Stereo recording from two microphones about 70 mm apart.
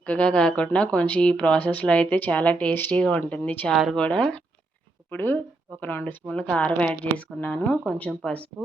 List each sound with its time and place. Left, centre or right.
0.0 s speech: centre
3.9 s speech: centre
5.1 s speech: left
6.3 s speech: centre